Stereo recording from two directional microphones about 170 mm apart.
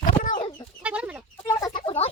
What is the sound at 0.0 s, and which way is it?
Chicken, 50° left (ahead or behind).